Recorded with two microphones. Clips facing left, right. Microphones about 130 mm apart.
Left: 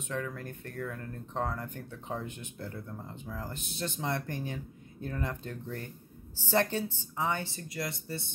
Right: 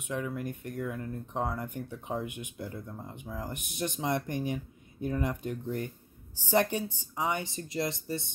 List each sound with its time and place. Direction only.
0.1 s speech: 15° right (ahead or behind)